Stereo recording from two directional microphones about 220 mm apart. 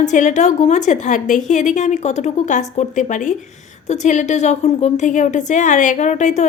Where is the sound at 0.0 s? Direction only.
35° left (ahead or behind).